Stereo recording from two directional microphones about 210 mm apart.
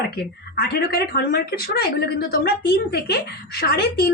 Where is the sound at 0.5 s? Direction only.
50° left (ahead or behind).